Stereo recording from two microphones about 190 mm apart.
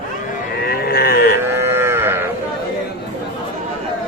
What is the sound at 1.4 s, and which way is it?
Moo, 10° right (ahead or behind).